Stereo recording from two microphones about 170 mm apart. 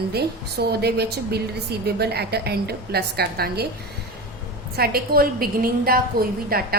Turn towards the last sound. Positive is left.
turn(degrees=-60)  # may be behind; listen again after turning